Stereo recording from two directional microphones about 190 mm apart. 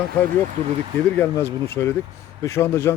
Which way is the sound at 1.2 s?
10° left (ahead or behind).